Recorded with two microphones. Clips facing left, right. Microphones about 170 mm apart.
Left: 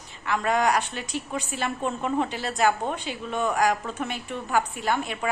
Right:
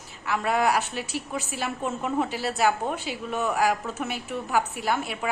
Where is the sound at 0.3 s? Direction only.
5° right (ahead or behind).